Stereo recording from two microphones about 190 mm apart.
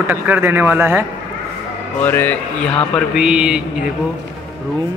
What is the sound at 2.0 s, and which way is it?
Speech, 10° left (ahead or behind).